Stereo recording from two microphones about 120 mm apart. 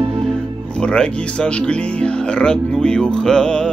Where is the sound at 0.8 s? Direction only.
5° left (ahead or behind).